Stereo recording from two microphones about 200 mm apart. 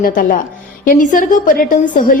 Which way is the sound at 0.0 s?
45° left (ahead or behind).